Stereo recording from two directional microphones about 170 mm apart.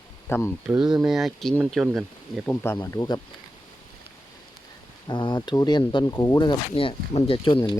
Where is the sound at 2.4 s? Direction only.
15° left (ahead or behind).